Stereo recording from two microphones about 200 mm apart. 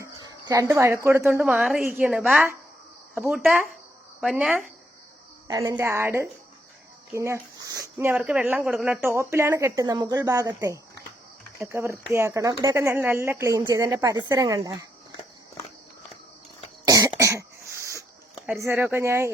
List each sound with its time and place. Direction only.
0.2 s a sound: 20° right (ahead or behind)
1.0 s speech: 10° right (ahead or behind)
5.5 s speech: 15° right (ahead or behind)
16.8 s cough: 20° right (ahead or behind)
17.9 s a sound: 10° right (ahead or behind)
18.6 s speech: 10° right (ahead or behind)